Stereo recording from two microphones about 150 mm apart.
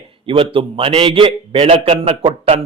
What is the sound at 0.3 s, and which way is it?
A man's voice, 35° right (ahead or behind).